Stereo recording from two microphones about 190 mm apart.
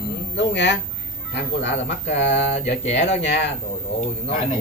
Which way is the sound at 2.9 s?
35° left (ahead or behind).